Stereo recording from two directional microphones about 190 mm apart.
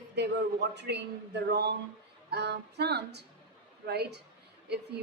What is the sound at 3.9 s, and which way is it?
Speech, 60° right (ahead or behind).